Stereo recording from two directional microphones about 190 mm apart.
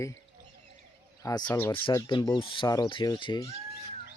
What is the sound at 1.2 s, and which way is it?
Speech, 20° left (ahead or behind).